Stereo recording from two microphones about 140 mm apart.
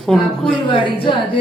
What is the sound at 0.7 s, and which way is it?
Speech, 35° left (ahead or behind).